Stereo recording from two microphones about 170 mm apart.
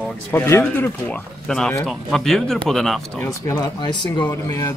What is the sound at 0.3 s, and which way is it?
Speech, 15° left (ahead or behind).